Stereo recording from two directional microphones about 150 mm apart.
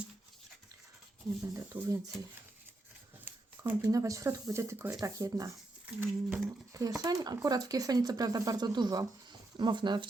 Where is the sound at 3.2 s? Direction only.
20° right (ahead or behind).